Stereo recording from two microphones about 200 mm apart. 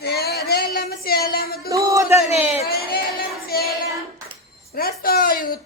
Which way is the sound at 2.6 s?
50° left (ahead or behind).